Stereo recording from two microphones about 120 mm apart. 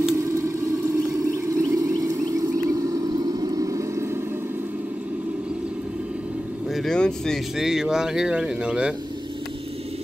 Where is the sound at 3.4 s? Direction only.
30° right (ahead or behind).